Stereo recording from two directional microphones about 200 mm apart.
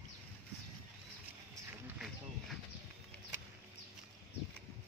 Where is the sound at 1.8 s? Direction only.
Centre (ahead or behind).